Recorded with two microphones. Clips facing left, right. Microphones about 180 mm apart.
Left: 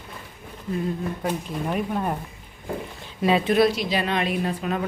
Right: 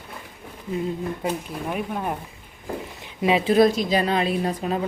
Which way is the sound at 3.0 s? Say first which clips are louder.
Even; 20° right (ahead or behind).